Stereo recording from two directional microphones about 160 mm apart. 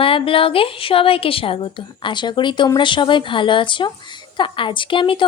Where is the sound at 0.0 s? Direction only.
35° left (ahead or behind).